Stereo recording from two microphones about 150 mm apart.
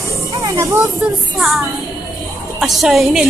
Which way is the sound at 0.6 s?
20° right (ahead or behind).